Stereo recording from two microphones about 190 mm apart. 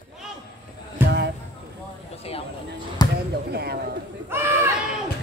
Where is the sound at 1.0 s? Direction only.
10° right (ahead or behind).